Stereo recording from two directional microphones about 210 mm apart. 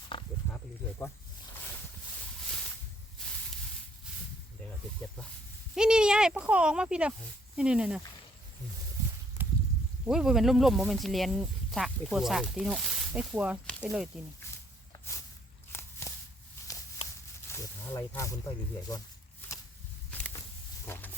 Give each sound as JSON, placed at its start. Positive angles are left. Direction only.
{"t": 0.1, "sound": "wild animals", "side_deg": 25}
{"t": 0.5, "sound": "snake", "side_deg": 10}
{"t": 3.2, "sound": "a sound", "side_deg": 5}
{"t": 5.7, "sound": "speech", "side_deg": -5}
{"t": 9.4, "sound": "a sound", "side_deg": -10}
{"t": 10.1, "sound": "speech", "side_deg": 0}
{"t": 15.7, "sound": "walk", "side_deg": 10}
{"t": 17.5, "sound": "snake", "side_deg": 10}
{"t": 20.1, "sound": "a sound", "side_deg": 5}